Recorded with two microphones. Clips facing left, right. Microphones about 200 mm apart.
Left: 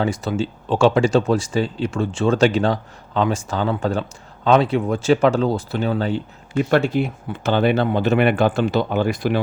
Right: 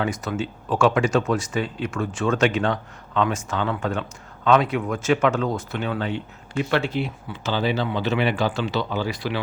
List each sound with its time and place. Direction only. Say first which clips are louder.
0.0 s speech: left 4 dB; 30° left (ahead or behind); by 9.4 s 50° left (ahead or behind)